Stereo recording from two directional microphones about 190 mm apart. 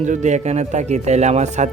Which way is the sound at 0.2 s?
35° right (ahead or behind).